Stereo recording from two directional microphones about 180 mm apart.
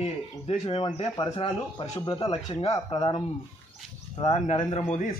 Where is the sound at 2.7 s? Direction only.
25° left (ahead or behind).